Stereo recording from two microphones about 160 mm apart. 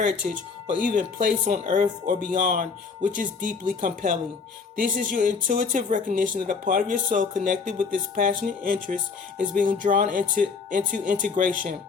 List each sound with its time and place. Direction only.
0.8 s speech: 60° right (ahead or behind)